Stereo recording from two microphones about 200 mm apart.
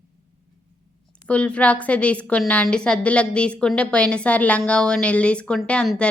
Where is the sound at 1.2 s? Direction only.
5° left (ahead or behind).